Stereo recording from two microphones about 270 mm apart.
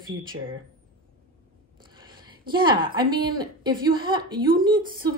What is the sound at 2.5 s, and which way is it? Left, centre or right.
A woman's voice, centre.